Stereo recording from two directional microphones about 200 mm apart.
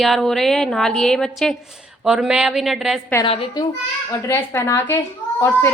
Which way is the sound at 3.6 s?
20° left (ahead or behind).